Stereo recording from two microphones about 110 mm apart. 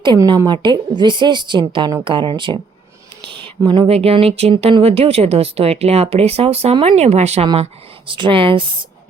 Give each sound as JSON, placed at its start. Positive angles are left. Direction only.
{"t": 0.3, "sound": "a woman's voice", "side_deg": -40}
{"t": 3.2, "sound": "a sound", "side_deg": -45}
{"t": 3.8, "sound": "speech", "side_deg": -65}
{"t": 7.4, "sound": "a woman's voice", "side_deg": -55}